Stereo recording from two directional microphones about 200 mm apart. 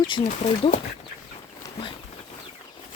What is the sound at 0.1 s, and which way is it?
Speech, 30° left (ahead or behind).